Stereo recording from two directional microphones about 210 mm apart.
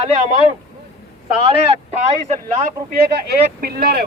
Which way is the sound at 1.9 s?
35° right (ahead or behind).